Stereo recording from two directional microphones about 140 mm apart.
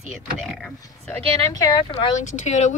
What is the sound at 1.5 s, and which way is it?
Speech, 30° left (ahead or behind).